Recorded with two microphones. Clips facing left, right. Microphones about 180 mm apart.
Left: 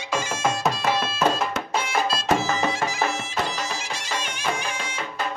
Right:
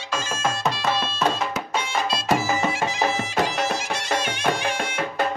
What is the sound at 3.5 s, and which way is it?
Music, 60° right (ahead or behind).